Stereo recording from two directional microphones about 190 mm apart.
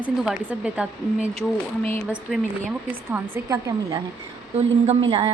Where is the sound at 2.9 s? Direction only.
10° right (ahead or behind).